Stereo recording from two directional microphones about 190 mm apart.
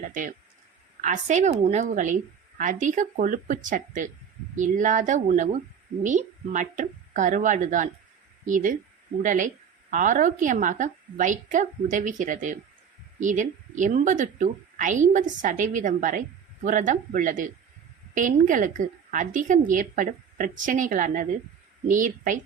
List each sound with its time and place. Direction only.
1.0 s a woman's voice: 40° right (ahead or behind)